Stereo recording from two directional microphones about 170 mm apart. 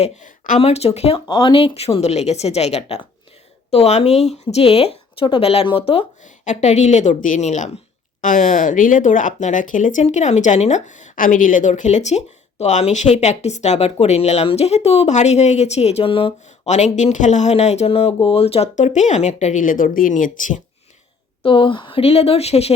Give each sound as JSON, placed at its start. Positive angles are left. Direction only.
{"t": 0.0, "sound": "speech", "side_deg": 50}
{"t": 21.4, "sound": "speech", "side_deg": 30}